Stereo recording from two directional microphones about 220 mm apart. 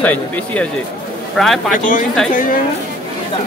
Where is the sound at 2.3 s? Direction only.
40° left (ahead or behind).